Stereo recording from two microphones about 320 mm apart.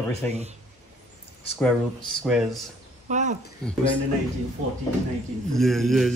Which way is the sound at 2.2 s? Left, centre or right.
Centre.